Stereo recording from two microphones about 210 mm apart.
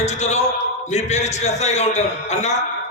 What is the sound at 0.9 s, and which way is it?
Speech, 35° left (ahead or behind).